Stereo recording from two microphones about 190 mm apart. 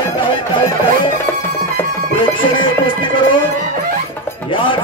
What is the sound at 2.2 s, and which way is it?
Speech, 25° left (ahead or behind).